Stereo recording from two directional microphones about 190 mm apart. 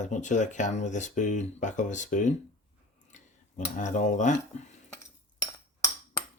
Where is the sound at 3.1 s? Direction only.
40° left (ahead or behind).